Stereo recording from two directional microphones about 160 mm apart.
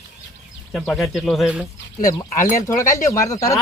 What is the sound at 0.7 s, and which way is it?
Speech, centre (ahead or behind).